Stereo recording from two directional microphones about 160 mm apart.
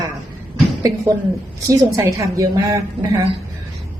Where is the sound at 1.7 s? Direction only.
20° right (ahead or behind).